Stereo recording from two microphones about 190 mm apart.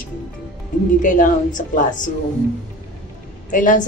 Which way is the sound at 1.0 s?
45° left (ahead or behind).